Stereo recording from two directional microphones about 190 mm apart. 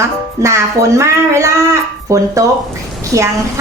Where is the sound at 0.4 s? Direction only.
15° right (ahead or behind).